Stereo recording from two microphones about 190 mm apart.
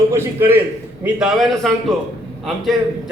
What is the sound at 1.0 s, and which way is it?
A man's voice, centre (ahead or behind).